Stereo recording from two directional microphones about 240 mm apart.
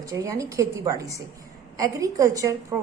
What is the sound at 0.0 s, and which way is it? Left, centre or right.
A woman's voice, centre.